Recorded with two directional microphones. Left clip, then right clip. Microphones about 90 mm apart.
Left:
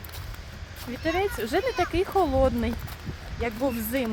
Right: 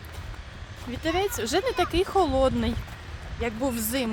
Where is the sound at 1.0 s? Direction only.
30° right (ahead or behind).